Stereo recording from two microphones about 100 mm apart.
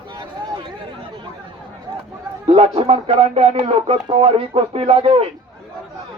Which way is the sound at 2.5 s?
70° right (ahead or behind).